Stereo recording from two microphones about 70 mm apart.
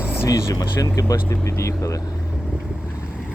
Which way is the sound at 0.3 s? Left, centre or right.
Left.